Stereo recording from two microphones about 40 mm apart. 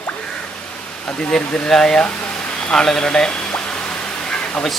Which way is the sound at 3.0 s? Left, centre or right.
Left.